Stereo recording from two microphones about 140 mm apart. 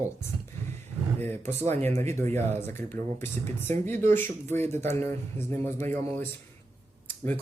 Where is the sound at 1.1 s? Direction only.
15° left (ahead or behind).